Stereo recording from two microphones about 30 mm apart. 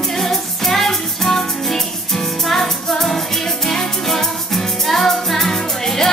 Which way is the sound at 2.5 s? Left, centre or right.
Centre.